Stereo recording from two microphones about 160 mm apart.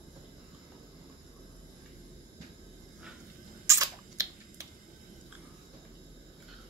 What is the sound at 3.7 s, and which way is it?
Camera, 20° right (ahead or behind).